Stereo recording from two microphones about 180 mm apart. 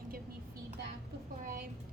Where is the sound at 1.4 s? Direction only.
55° right (ahead or behind).